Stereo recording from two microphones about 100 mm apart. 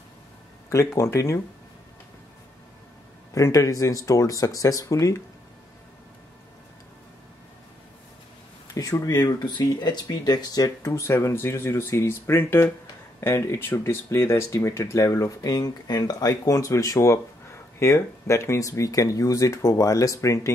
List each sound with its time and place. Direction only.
0.9 s speech: 35° left (ahead or behind)
3.3 s speech: 30° left (ahead or behind)
8.7 s speech: 35° left (ahead or behind)